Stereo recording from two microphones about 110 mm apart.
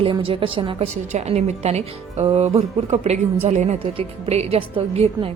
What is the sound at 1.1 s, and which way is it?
A woman's voice, 90° right.